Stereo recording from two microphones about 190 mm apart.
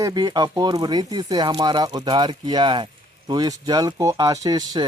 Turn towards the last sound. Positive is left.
turn(degrees=-20)  # may be behind; listen again after turning